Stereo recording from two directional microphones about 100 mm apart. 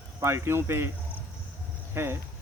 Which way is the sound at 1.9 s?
25° right (ahead or behind).